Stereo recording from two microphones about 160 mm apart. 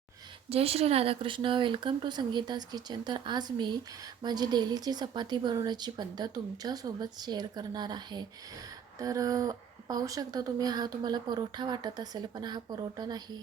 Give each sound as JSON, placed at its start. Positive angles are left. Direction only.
{"t": 0.5, "sound": "speech", "side_deg": -40}